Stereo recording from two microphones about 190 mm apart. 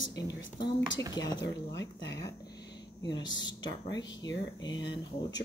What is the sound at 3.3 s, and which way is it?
Speech, 25° left (ahead or behind).